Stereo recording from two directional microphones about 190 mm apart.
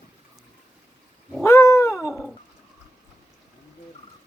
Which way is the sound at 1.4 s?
15° left (ahead or behind).